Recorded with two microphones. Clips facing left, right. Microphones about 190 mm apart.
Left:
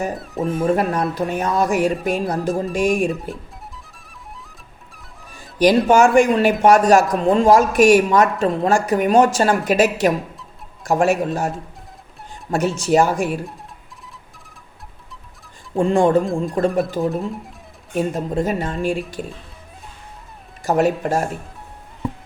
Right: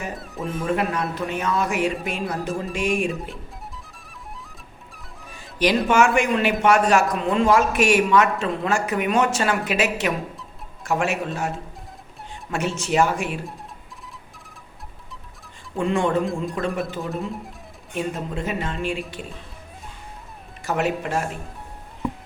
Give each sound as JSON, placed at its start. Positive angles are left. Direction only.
{"t": 0.2, "sound": "speech", "side_deg": 0}
{"t": 0.6, "sound": "speech", "side_deg": 40}
{"t": 5.5, "sound": "speech", "side_deg": 35}
{"t": 12.5, "sound": "speech", "side_deg": 40}
{"t": 15.7, "sound": "speech", "side_deg": 35}
{"t": 17.1, "sound": "speech", "side_deg": 0}
{"t": 17.9, "sound": "speech", "side_deg": 40}
{"t": 20.7, "sound": "speech", "side_deg": 40}